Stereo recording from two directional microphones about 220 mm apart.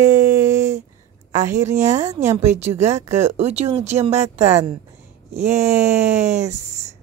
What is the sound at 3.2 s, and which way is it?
A woman's voice, 30° right (ahead or behind).